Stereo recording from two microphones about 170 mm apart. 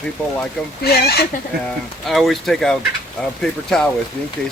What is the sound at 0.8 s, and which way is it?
Speech, 70° left (ahead or behind).